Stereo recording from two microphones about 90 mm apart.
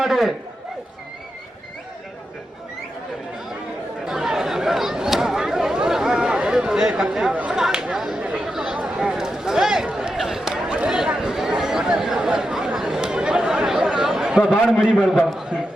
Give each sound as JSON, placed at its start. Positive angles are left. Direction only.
{"t": 0.0, "sound": "a man's voice", "side_deg": -5}
{"t": 4.0, "sound": "chatter", "side_deg": -5}